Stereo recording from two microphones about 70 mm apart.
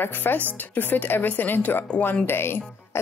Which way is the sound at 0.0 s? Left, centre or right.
Left.